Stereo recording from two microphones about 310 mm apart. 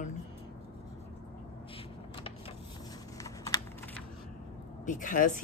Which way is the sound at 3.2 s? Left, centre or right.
Centre.